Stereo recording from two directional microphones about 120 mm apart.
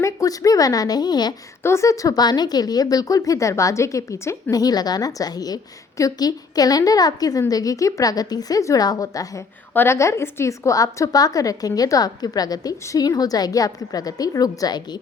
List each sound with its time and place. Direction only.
0.0 s a woman's voice: 30° left (ahead or behind)
1.6 s a woman's voice: 25° left (ahead or behind)